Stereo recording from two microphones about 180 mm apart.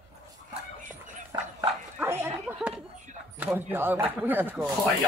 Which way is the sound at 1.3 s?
15° right (ahead or behind).